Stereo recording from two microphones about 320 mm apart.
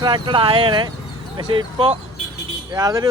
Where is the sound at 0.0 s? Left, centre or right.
Centre.